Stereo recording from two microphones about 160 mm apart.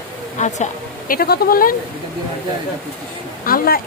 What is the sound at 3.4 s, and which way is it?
Speech, 65° left (ahead or behind).